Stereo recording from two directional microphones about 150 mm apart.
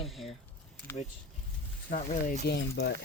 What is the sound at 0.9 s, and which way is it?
Speech, 15° left (ahead or behind).